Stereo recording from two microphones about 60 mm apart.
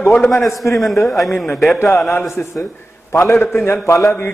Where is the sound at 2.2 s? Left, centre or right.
Left.